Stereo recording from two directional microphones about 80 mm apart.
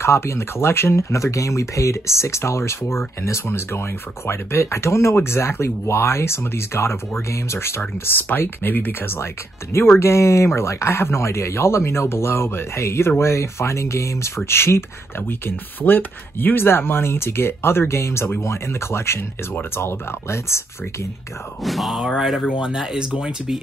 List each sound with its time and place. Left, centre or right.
0.0 s speech: left
21.6 s speech: centre